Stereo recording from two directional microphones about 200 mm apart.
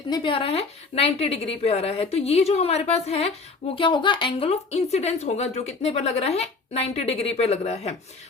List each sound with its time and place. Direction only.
0.1 s a woman's voice: 25° left (ahead or behind)